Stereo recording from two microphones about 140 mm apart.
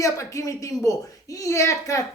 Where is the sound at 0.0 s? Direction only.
20° left (ahead or behind).